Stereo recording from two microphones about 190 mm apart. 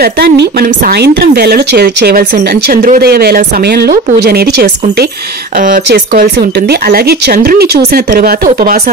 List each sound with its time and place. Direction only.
0.0 s speech: 55° right (ahead or behind)